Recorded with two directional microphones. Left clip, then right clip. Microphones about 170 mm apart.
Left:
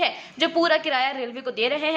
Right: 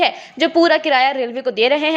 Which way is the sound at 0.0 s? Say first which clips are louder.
Right 6 dB; 25° right (ahead or behind).